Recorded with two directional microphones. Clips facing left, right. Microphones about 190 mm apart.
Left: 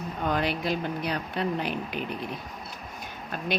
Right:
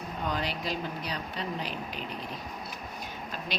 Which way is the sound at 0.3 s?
60° left (ahead or behind).